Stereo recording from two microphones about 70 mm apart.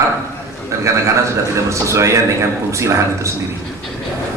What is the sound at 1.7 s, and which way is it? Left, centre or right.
Speech, right.